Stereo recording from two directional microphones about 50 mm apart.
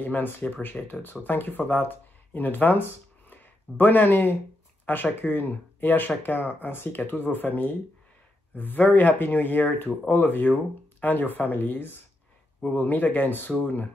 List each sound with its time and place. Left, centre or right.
0.0 s speech: left